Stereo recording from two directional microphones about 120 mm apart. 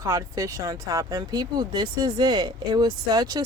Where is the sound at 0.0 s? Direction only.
30° right (ahead or behind).